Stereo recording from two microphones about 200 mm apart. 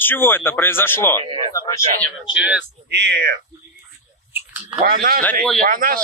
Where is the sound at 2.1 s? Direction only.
5° right (ahead or behind).